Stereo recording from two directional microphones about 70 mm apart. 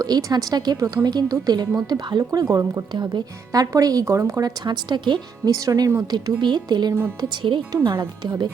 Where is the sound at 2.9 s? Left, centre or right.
Right.